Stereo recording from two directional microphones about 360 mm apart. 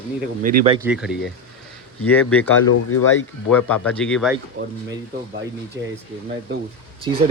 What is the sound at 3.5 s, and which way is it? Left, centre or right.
Speech, centre.